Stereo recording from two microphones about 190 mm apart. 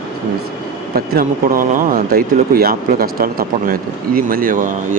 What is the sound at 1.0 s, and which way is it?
Speech, 50° right (ahead or behind).